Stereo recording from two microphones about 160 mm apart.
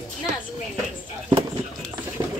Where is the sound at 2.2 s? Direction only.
25° right (ahead or behind).